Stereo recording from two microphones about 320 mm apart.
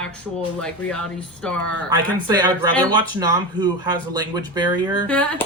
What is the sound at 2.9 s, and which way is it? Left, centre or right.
Speech, centre.